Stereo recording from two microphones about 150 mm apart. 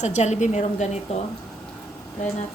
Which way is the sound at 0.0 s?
50° left (ahead or behind).